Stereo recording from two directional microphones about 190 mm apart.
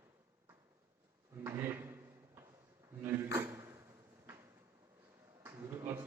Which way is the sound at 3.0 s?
15° right (ahead or behind).